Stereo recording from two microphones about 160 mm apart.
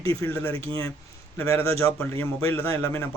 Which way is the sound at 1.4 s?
15° left (ahead or behind).